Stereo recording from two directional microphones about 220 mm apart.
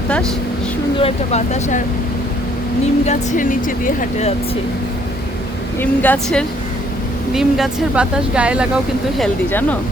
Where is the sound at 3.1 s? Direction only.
35° left (ahead or behind).